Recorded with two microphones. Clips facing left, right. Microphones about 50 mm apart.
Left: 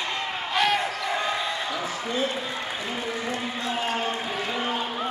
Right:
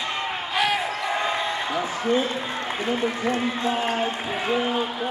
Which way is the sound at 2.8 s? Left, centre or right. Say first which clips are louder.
Right 9 dB; right.